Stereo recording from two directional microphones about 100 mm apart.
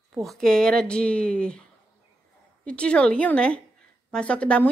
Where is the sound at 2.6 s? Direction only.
10° left (ahead or behind).